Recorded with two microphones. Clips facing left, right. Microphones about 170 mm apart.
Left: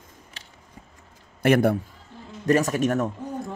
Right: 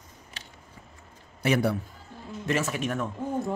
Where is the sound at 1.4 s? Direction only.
50° left (ahead or behind).